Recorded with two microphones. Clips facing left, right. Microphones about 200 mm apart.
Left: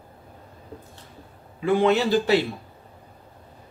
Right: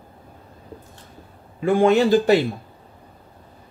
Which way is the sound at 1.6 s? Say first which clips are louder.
Right 4 dB; 50° right (ahead or behind).